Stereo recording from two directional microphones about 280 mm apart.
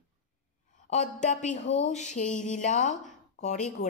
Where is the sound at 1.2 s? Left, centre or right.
Left.